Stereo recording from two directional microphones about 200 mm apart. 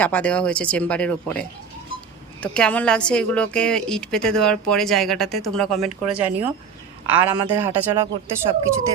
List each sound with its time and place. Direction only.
0.0 s a woman's voice: 5° left (ahead or behind); by 7.9 s 10° right (ahead or behind)
8.5 s speech: 25° right (ahead or behind)